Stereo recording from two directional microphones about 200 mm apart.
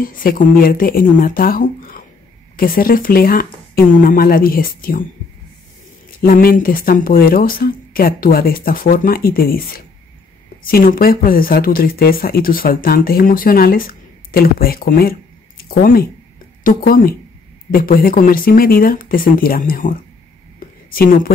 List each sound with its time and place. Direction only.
0.0 s speech: 45° left (ahead or behind)
6.2 s speech: 45° left (ahead or behind)
20.5 s a sound: 45° left (ahead or behind)